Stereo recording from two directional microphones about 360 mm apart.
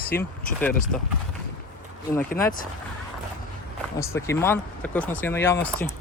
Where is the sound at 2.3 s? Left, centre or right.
Left.